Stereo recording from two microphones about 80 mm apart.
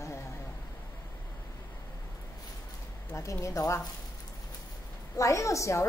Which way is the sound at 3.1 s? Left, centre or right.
Left.